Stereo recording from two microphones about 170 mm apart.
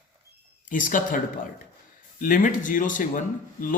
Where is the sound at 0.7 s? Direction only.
50° left (ahead or behind).